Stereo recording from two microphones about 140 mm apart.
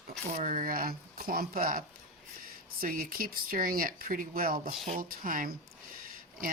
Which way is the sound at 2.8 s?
90° right.